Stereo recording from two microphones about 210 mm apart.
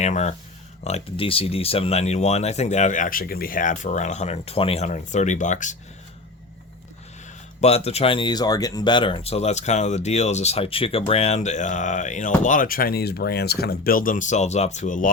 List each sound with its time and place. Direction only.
0.0 s speech: 35° left (ahead or behind)
7.6 s speech: 30° left (ahead or behind)